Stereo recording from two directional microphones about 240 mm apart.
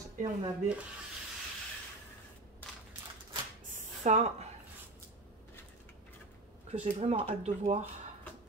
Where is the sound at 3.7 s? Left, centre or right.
Right.